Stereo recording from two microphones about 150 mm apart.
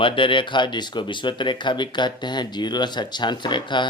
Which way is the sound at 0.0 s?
35° left (ahead or behind).